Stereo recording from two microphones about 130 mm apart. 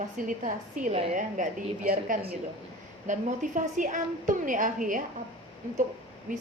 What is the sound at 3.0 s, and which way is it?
A woman's voice, 75° right (ahead or behind).